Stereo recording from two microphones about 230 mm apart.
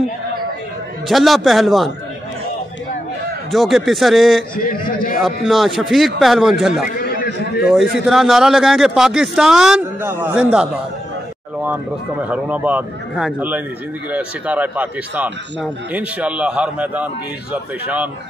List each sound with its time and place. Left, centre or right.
1.0 s a man's voice: centre
3.5 s a man's voice: centre
4.6 s a man's voice: left
5.1 s a man's voice: centre
7.0 s a sound: left
7.9 s a man's voice: centre